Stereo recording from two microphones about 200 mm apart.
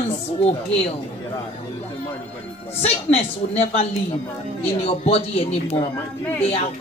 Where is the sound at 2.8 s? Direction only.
30° left (ahead or behind).